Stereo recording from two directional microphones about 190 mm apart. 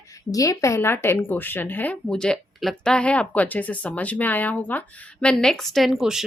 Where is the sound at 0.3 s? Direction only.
20° left (ahead or behind).